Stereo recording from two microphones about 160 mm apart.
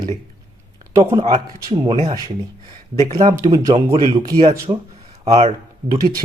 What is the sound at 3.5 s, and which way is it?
Speech, 25° right (ahead or behind).